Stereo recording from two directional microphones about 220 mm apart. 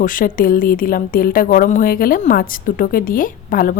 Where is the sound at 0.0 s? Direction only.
35° left (ahead or behind).